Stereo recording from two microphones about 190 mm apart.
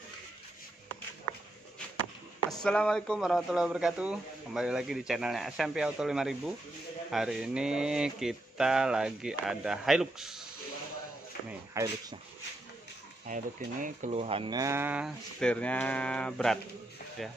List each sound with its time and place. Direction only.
2.6 s a man's voice: 5° left (ahead or behind)
11.7 s speech: 15° right (ahead or behind)
13.3 s speech: 45° right (ahead or behind); by 15.1 s 5° right (ahead or behind)
15.4 s a man's voice: 5° left (ahead or behind)